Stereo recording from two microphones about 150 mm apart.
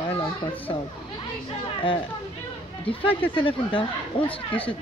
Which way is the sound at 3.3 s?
35° left (ahead or behind).